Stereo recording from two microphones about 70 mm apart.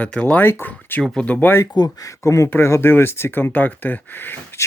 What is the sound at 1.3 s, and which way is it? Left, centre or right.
Speech, left.